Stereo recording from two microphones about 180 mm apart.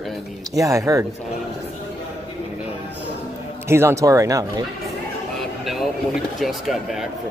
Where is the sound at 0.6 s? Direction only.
20° right (ahead or behind).